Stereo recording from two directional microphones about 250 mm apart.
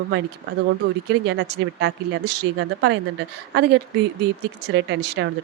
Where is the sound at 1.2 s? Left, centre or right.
Right.